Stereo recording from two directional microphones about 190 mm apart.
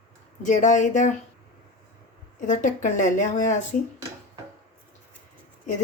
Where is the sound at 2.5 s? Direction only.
40° left (ahead or behind).